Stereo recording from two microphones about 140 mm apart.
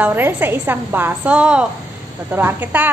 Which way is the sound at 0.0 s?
15° right (ahead or behind).